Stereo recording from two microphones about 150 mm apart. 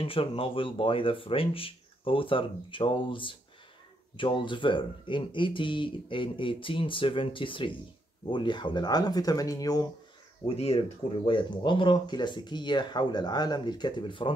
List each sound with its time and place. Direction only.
0.0 s speech: 35° left (ahead or behind)
10.5 s speech: 40° left (ahead or behind)